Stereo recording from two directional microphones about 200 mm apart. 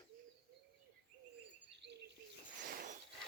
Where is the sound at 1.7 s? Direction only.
60° right (ahead or behind).